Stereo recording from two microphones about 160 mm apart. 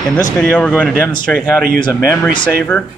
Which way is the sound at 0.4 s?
10° left (ahead or behind).